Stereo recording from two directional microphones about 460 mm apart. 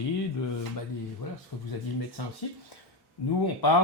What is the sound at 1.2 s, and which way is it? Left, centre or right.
Speech, left.